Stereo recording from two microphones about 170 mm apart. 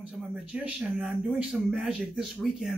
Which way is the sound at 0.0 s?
5° right (ahead or behind).